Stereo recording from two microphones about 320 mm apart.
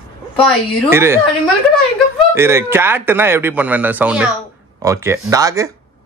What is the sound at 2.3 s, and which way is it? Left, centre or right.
Speech, centre.